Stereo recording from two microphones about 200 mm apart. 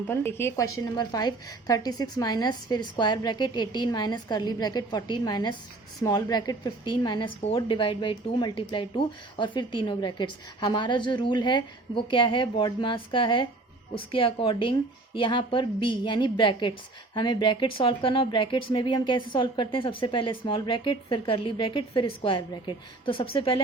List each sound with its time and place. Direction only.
0.1 s a woman's voice: 10° left (ahead or behind); by 23.6 s 30° left (ahead or behind)